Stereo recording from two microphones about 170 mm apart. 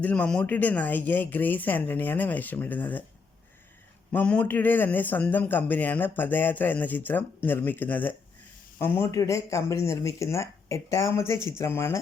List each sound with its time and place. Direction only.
0.0 s speech: 10° left (ahead or behind)
4.1 s speech: 10° left (ahead or behind)